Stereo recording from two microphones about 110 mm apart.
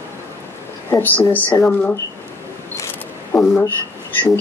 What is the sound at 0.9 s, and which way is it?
Speech, 25° left (ahead or behind).